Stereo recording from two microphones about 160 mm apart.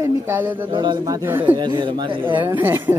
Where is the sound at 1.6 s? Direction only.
30° right (ahead or behind).